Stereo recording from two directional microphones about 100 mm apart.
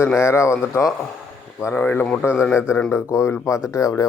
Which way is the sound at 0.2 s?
30° left (ahead or behind).